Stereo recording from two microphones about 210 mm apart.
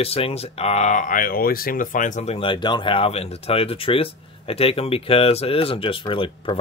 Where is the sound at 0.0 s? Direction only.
30° left (ahead or behind).